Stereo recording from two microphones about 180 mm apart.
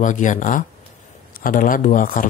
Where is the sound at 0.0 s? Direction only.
45° left (ahead or behind).